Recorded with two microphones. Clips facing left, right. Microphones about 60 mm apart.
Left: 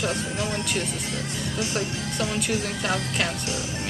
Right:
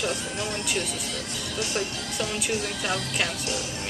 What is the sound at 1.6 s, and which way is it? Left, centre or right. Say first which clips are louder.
Speech: left 1 dB; left.